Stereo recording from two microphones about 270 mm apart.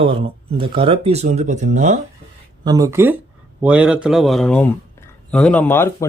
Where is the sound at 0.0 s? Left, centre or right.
Centre.